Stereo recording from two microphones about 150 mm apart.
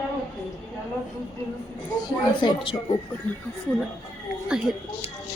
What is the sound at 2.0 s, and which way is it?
Speech, 30° left (ahead or behind).